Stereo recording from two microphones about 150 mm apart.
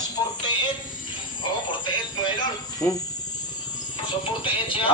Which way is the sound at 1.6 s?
30° left (ahead or behind).